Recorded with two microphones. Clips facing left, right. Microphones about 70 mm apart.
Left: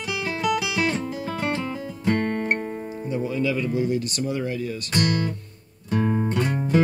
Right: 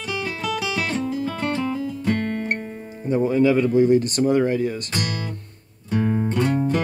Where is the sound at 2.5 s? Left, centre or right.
Centre.